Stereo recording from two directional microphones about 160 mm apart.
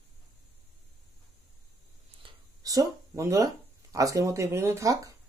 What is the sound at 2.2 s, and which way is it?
Speech, 25° right (ahead or behind).